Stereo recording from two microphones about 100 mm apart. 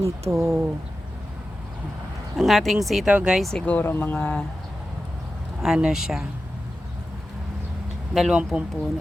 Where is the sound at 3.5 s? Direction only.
15° left (ahead or behind).